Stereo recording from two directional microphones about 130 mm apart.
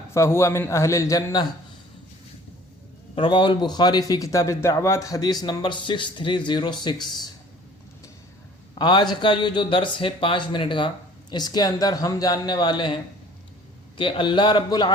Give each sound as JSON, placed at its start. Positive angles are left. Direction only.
{"t": 0.1, "sound": "a man's voice", "side_deg": 20}
{"t": 3.2, "sound": "a man's voice", "side_deg": 40}
{"t": 8.7, "sound": "a man's voice", "side_deg": 35}